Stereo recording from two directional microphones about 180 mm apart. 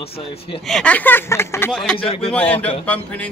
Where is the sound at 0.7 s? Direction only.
5° left (ahead or behind).